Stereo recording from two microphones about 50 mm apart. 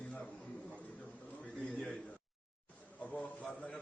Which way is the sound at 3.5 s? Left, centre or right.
Centre.